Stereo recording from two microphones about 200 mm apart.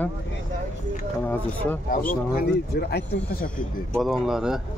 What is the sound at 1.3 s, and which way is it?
Speech, 10° left (ahead or behind).